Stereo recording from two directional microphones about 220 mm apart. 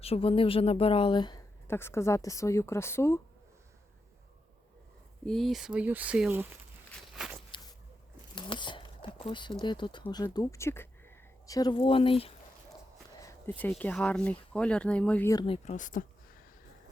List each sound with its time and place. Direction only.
0.0 s speech: 25° left (ahead or behind)
5.2 s speech: centre (ahead or behind)
6.9 s walk: centre (ahead or behind)
8.4 s speech: 20° left (ahead or behind)
13.2 s speech: 10° left (ahead or behind); by 16.0 s 35° left (ahead or behind)